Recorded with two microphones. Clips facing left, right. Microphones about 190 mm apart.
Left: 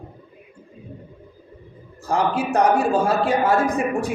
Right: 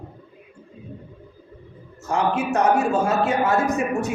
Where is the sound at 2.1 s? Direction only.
35° left (ahead or behind).